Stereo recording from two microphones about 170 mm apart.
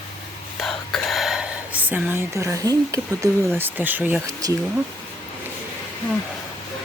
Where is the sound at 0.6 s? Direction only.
Centre (ahead or behind).